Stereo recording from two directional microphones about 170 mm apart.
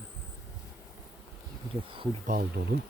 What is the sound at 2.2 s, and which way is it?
Speech, 55° right (ahead or behind).